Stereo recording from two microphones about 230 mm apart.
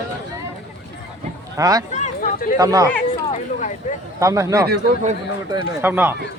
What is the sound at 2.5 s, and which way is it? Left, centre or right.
Speech, centre.